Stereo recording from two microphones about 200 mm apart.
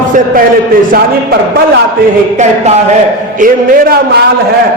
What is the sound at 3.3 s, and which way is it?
Speech, 45° right (ahead or behind).